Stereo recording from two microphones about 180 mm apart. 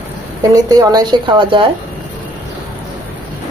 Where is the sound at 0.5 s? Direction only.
20° right (ahead or behind).